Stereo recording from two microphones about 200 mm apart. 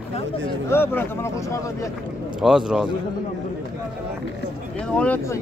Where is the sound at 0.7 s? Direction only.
10° left (ahead or behind).